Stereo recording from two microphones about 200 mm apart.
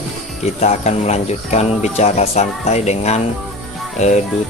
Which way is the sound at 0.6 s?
35° left (ahead or behind).